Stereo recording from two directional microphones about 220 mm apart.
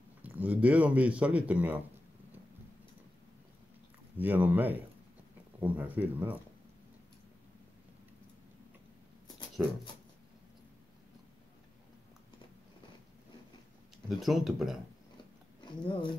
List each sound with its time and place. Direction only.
0.2 s speech: 5° right (ahead or behind)
4.2 s speech: 10° right (ahead or behind)
14.0 s speech: centre (ahead or behind)
15.6 s speech: 20° left (ahead or behind)